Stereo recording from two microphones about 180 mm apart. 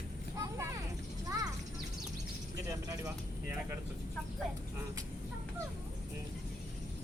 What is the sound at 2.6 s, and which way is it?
Vehicle, 15° right (ahead or behind).